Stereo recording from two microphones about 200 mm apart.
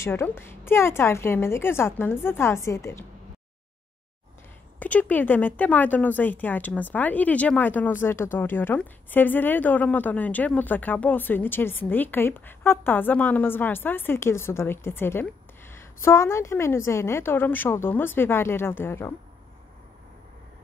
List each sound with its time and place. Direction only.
0.0 s speech: 10° left (ahead or behind)
4.7 s speech: 5° left (ahead or behind)